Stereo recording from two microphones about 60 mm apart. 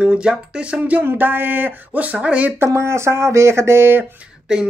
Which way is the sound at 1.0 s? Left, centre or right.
Right.